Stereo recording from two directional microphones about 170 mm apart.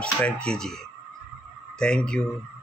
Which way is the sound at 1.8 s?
5° left (ahead or behind).